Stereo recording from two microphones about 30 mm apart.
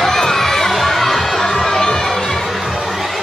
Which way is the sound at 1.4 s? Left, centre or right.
Centre.